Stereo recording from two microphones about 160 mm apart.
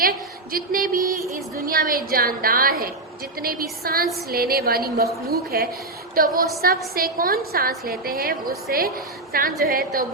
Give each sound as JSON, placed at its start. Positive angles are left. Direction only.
{"t": 0.5, "sound": "a woman's voice", "side_deg": -60}